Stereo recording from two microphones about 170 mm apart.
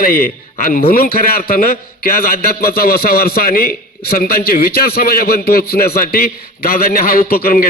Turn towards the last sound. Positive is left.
turn(degrees=60)  # may be behind; listen again after turning